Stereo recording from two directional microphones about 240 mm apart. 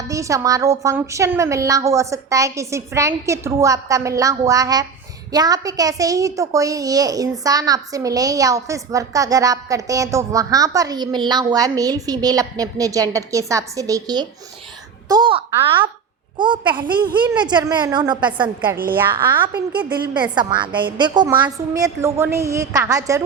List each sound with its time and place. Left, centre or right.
0.1 s a child's voice: centre
18.9 s a child's voice: centre
20.3 s a child's voice: centre